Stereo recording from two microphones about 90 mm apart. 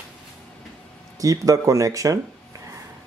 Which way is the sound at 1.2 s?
40° right (ahead or behind).